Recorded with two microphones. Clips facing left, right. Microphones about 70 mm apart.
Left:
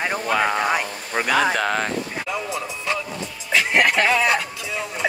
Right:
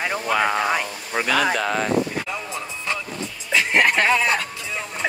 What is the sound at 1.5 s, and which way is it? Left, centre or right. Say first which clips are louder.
Speech: left 1 dB; left.